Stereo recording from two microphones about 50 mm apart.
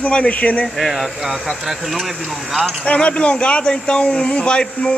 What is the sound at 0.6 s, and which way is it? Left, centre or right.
Speech, centre.